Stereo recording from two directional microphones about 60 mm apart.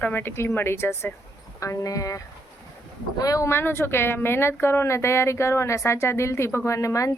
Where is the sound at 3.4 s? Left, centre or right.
Left.